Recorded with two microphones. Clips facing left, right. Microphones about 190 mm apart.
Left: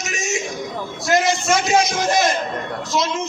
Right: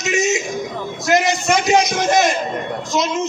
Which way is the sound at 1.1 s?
20° right (ahead or behind).